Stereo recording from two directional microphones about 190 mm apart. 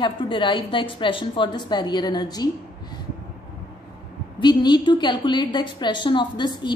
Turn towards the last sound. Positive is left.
turn(degrees=25)  # may be behind; listen again after turning